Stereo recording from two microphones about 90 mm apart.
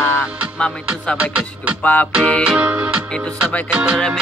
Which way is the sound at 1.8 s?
20° left (ahead or behind).